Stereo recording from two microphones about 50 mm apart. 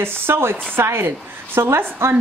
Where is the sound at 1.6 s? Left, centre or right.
Right.